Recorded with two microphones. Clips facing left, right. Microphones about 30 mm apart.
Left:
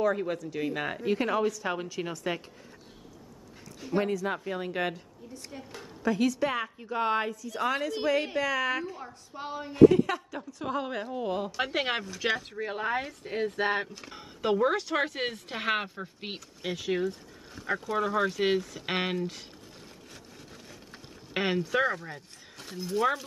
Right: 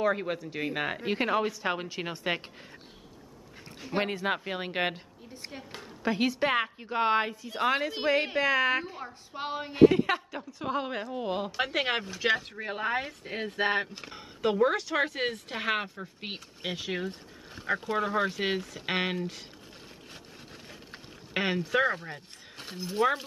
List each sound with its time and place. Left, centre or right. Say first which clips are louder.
0.0 s speech: left 1 dB; right
3.9 s a woman's voice: left 1 dB; right
10.3 s speech: right 1 dB; right
11.5 s speech: right 1 dB; centre
16.6 s speech: left 1 dB; right
17.6 s a sound: right 1 dB; right
17.9 s speech: left 2 dB; centre
21.3 s a sound: even; centre
21.5 s speech: right 2 dB; centre; by 23.0 s right